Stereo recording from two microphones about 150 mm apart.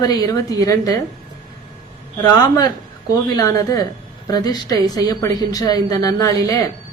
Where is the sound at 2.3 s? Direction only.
25° left (ahead or behind).